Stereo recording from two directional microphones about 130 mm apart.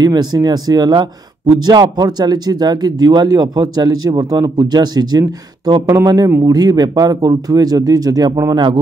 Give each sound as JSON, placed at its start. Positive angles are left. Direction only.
{"t": 0.0, "sound": "speech", "side_deg": -30}